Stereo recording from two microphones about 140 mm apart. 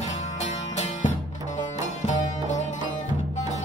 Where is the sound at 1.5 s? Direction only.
60° left (ahead or behind).